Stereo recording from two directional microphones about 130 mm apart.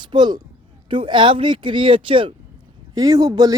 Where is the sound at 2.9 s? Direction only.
30° right (ahead or behind).